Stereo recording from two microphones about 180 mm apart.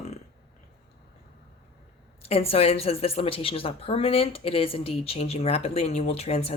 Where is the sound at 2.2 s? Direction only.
35° left (ahead or behind).